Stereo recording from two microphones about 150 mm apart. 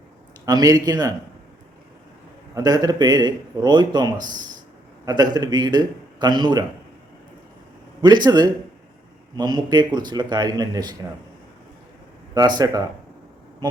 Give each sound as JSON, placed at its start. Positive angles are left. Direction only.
{"t": 0.4, "sound": "speech", "side_deg": -25}
{"t": 2.6, "sound": "speech", "side_deg": -25}
{"t": 8.0, "sound": "speech", "side_deg": -30}
{"t": 12.5, "sound": "speech", "side_deg": -25}